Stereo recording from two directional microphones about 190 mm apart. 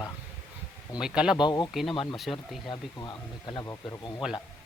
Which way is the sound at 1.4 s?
20° left (ahead or behind).